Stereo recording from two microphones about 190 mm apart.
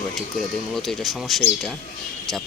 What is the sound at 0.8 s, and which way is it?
Speech, centre (ahead or behind).